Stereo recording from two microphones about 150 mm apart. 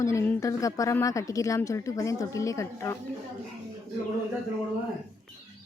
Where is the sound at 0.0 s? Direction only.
20° left (ahead or behind).